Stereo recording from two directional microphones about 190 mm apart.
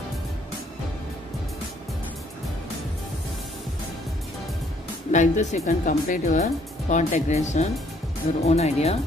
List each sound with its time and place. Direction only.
5.1 s speech: 40° left (ahead or behind)